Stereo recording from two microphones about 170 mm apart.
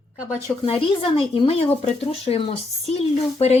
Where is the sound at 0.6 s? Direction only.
30° left (ahead or behind).